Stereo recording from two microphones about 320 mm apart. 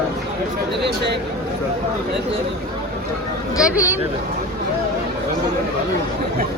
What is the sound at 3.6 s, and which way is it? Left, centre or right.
Speech, centre.